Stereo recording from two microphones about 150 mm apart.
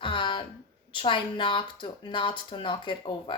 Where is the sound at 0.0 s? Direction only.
30° left (ahead or behind).